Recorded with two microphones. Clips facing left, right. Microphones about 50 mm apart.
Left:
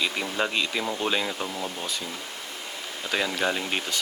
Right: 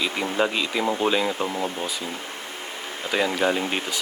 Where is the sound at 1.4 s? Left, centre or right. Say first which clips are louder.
Right 5 dB; centre.